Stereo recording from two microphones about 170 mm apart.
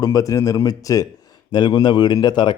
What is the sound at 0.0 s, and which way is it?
Speech, 20° left (ahead or behind).